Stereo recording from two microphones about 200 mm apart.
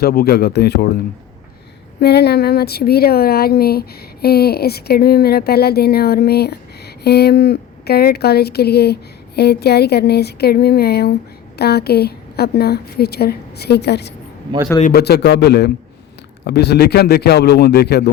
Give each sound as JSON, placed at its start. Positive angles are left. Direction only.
{"t": 0.0, "sound": "speech", "side_deg": 50}
{"t": 2.0, "sound": "a man's voice", "side_deg": 55}